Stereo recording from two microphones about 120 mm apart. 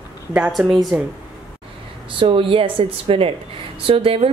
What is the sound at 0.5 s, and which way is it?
Music, 5° right (ahead or behind).